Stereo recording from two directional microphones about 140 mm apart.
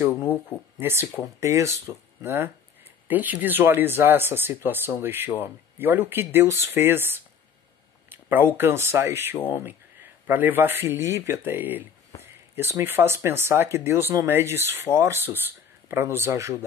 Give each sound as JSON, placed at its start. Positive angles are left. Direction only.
{"t": 0.7, "sound": "speech", "side_deg": -15}
{"t": 8.1, "sound": "a sound", "side_deg": -15}
{"t": 8.5, "sound": "speech", "side_deg": -20}